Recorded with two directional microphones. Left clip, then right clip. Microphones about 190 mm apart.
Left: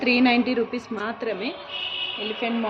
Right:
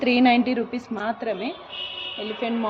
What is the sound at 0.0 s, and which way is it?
A woman's voice, 50° right (ahead or behind).